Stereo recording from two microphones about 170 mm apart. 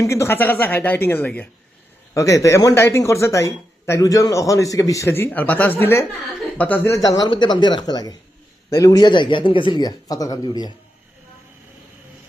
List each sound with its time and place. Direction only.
0.0 s speech: 15° left (ahead or behind)